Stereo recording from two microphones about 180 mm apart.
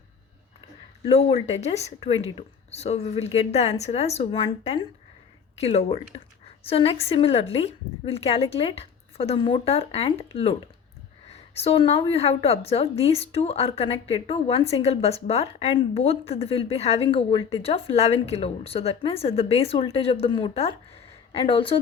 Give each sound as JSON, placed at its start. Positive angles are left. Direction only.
{"t": 1.0, "sound": "a woman's voice", "side_deg": 35}